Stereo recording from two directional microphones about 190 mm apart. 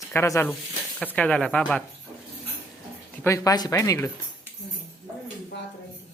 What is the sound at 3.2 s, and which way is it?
Speech, 15° left (ahead or behind).